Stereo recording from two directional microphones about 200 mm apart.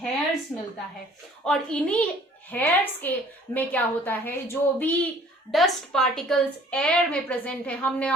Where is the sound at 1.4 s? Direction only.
5° left (ahead or behind).